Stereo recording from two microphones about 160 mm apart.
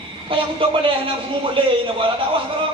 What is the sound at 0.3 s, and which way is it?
Speech, 30° right (ahead or behind).